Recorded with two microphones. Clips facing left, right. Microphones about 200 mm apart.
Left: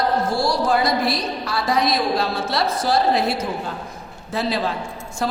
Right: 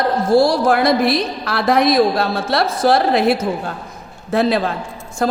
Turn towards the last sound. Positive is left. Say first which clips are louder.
# right 5 dB
turn(degrees=-50)  # may be behind; listen again after turning